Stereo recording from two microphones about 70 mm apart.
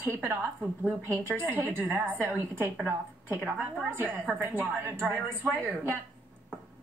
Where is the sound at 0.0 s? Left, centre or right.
Right.